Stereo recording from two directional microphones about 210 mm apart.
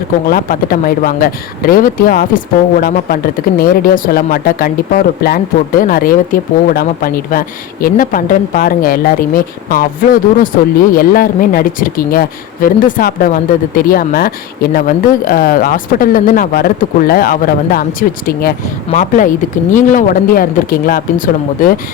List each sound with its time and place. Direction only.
0.3 s speech: 40° left (ahead or behind)